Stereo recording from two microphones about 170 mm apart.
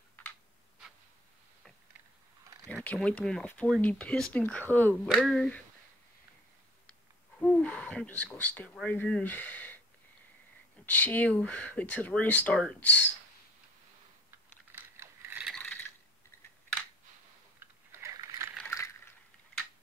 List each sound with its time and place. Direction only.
2.7 s speech: 5° left (ahead or behind)
6.9 s a sound: 10° left (ahead or behind)
8.8 s speech: 10° left (ahead or behind)
10.9 s speech: 10° left (ahead or behind)
14.7 s mechanisms: 15° right (ahead or behind)
15.5 s filing: 5° left (ahead or behind)
17.6 s typing: 15° right (ahead or behind)
18.6 s a sound: 15° left (ahead or behind)